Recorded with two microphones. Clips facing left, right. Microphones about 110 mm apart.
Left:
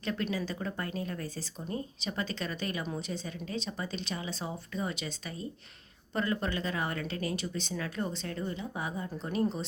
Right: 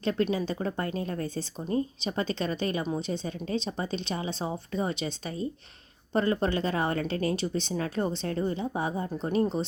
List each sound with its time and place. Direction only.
0.0 s a woman's voice: 30° right (ahead or behind)
6.1 s a woman's voice: 30° right (ahead or behind)